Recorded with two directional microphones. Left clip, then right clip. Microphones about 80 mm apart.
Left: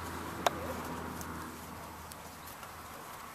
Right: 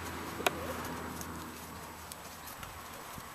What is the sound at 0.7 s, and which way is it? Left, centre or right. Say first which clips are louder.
Pigeon: even; centre.